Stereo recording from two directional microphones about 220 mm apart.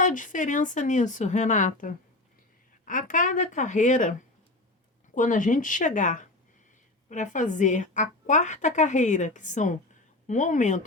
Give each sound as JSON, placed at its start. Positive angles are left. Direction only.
{"t": 0.0, "sound": "a woman's voice", "side_deg": 35}
{"t": 5.1, "sound": "a woman's voice", "side_deg": 35}